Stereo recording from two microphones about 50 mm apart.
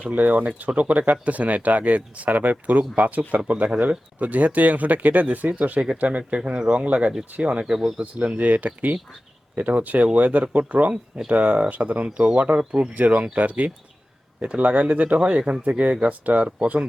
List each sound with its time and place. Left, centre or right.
0.1 s speech: right